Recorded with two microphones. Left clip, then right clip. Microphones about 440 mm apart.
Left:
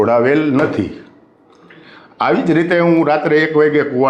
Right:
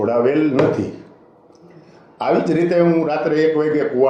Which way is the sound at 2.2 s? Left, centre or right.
Left.